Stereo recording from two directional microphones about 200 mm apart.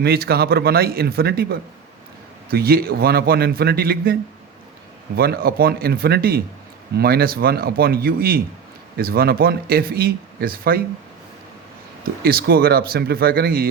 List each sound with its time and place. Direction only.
0.0 s speech: 50° right (ahead or behind)
12.2 s speech: 50° right (ahead or behind)